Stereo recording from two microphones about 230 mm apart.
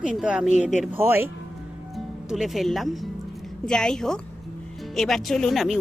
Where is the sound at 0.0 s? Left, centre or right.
Centre.